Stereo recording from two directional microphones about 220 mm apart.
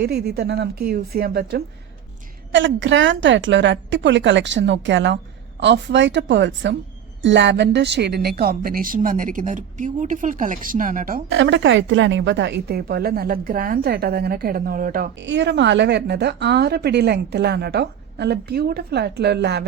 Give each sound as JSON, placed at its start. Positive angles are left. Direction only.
{"t": 0.0, "sound": "a woman's voice", "side_deg": -50}
{"t": 11.3, "sound": "speech", "side_deg": -55}
{"t": 15.2, "sound": "speech", "side_deg": -55}